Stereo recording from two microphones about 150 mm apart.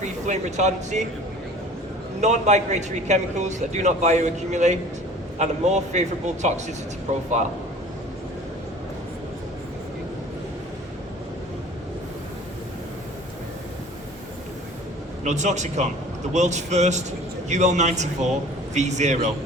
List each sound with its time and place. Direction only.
0.0 s a man's voice: 50° right (ahead or behind)
2.2 s a man's voice: 50° right (ahead or behind)
15.2 s a man's voice: 50° right (ahead or behind)